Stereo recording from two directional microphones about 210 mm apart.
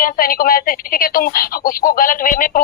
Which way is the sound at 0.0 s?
45° left (ahead or behind).